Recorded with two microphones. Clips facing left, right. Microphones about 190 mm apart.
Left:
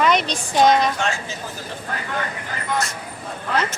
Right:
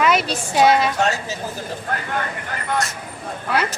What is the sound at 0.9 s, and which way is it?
Speech, 40° right (ahead or behind).